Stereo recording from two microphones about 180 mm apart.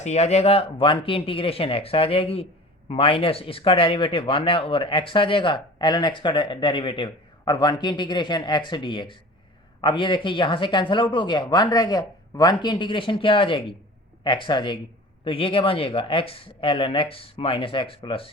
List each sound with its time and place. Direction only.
0.0 s speech: 40° left (ahead or behind)